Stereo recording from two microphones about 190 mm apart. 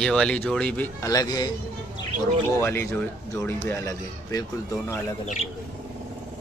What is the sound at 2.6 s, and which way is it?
Speech, 10° left (ahead or behind).